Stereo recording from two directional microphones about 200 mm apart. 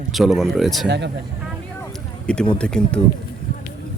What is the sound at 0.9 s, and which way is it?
Speech, 60° right (ahead or behind).